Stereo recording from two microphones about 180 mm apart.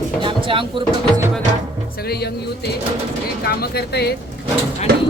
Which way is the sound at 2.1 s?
65° left (ahead or behind).